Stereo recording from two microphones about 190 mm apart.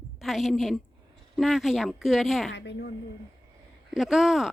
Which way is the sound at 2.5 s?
65° left (ahead or behind).